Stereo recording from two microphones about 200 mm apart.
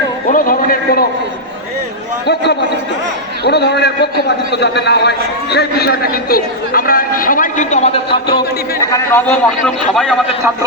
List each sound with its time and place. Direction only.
0.3 s a man's voice: 45° left (ahead or behind)
2.2 s a man's voice: 55° left (ahead or behind); by 10.2 s centre (ahead or behind)